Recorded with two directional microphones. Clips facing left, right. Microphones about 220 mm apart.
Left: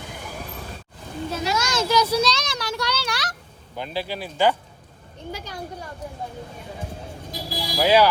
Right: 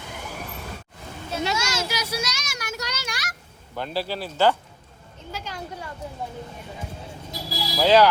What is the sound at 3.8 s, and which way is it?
Speech, 15° left (ahead or behind).